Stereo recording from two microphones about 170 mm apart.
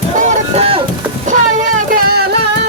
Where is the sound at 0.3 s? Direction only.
35° right (ahead or behind).